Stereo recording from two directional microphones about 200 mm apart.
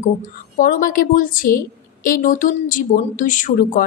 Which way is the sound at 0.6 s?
40° left (ahead or behind).